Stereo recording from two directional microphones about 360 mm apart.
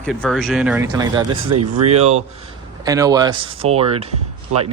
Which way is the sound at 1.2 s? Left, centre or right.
Right.